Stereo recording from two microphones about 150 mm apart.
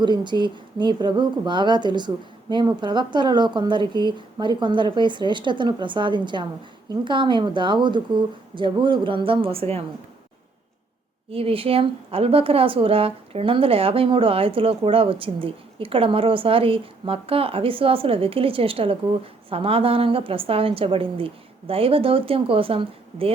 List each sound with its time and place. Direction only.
0.0 s speech: 30° right (ahead or behind)
11.3 s speech: 40° right (ahead or behind)